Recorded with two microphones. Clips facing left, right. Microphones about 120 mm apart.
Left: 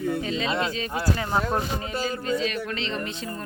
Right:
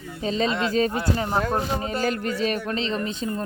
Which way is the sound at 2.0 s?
60° right (ahead or behind).